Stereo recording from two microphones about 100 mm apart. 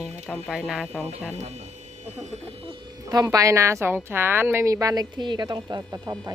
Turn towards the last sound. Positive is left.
turn(degrees=-35)  # may be behind; listen again after turning